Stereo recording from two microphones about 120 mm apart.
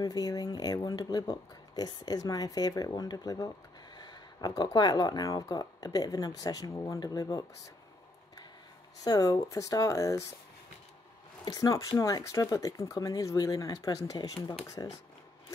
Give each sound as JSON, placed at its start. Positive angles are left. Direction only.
{"t": 0.0, "sound": "speech", "side_deg": 30}
{"t": 9.0, "sound": "speech", "side_deg": 30}
{"t": 11.4, "sound": "speech", "side_deg": 30}